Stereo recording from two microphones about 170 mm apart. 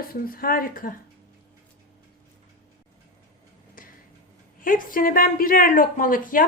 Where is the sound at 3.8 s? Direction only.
55° left (ahead or behind).